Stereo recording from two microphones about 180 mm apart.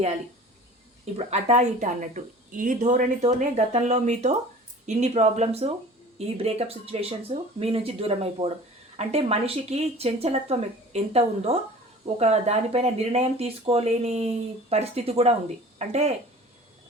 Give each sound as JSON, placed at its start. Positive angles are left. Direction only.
{"t": 1.3, "sound": "speech", "side_deg": -40}